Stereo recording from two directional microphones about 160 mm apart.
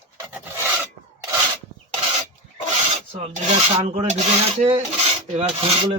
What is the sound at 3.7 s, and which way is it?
Rub, 45° right (ahead or behind).